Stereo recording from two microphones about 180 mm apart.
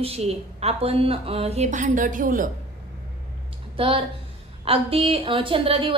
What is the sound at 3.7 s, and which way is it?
A woman's voice, 30° right (ahead or behind).